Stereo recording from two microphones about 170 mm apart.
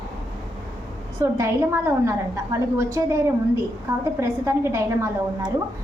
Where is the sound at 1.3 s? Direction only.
15° right (ahead or behind).